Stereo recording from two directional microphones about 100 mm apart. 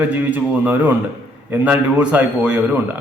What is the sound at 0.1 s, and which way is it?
A man's voice, 15° right (ahead or behind).